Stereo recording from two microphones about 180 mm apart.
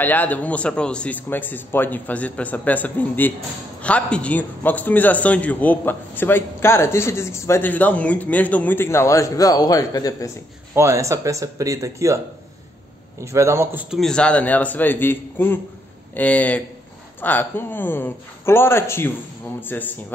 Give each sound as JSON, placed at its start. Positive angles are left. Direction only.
{"t": 0.0, "sound": "a man's voice", "side_deg": 10}
{"t": 10.7, "sound": "speech", "side_deg": -15}
{"t": 13.2, "sound": "a man's voice", "side_deg": -15}